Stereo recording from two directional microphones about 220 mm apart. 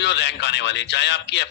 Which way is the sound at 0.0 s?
55° left (ahead or behind).